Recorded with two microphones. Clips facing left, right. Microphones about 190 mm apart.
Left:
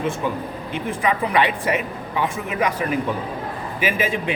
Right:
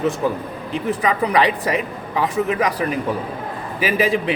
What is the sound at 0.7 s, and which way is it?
Speech, 40° right (ahead or behind).